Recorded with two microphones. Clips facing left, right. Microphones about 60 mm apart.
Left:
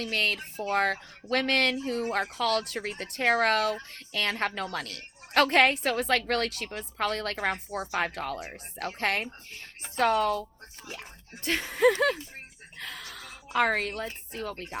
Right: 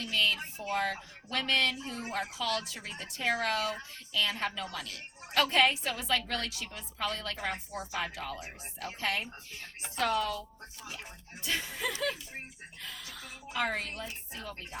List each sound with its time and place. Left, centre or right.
0.0 s a woman's voice: left
11.4 s a woman's voice: left